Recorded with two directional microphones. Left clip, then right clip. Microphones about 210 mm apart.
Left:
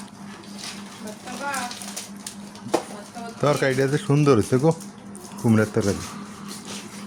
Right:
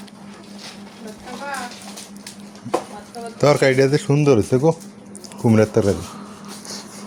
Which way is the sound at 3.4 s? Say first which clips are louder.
Right 6 dB; 25° right (ahead or behind).